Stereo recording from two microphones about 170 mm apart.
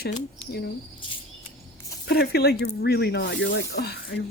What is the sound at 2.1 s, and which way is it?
Speech, 70° left (ahead or behind).